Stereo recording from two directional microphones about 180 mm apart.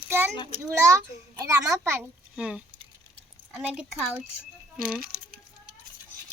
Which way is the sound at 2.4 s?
5° right (ahead or behind).